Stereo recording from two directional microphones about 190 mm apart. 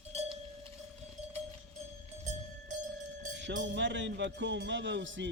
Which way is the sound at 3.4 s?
70° right (ahead or behind).